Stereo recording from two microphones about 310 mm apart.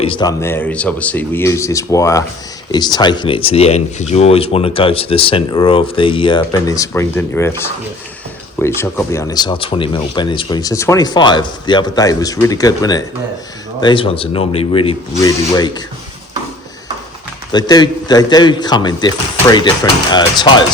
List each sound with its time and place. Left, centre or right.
0.0 s speech: centre
8.5 s speech: centre
17.5 s speech: centre